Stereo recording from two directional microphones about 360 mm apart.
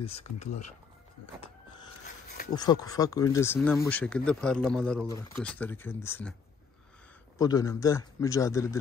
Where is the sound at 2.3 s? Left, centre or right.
Left.